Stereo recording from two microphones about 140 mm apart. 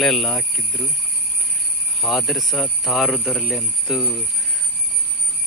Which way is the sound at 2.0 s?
Centre (ahead or behind).